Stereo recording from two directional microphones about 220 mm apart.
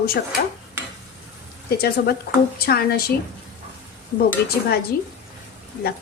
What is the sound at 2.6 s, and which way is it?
Speech, 45° left (ahead or behind).